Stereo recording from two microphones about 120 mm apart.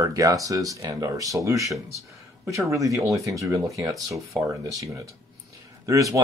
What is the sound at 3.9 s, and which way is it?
Speech, centre (ahead or behind).